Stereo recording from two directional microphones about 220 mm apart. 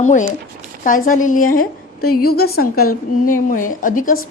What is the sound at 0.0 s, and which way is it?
A woman's voice, 35° left (ahead or behind).